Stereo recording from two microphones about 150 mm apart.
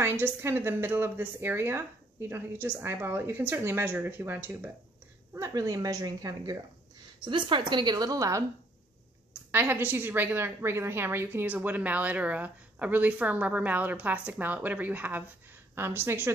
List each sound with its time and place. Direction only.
0.0 s a woman's voice: 15° right (ahead or behind)
9.5 s a woman's voice: 15° right (ahead or behind)